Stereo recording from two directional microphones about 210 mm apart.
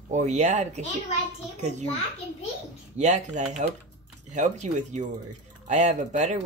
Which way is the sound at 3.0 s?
35° right (ahead or behind).